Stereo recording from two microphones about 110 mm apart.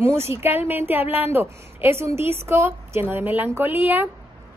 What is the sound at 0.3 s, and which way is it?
Speech, 20° right (ahead or behind).